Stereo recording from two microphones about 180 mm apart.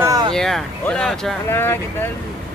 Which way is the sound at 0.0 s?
20° right (ahead or behind).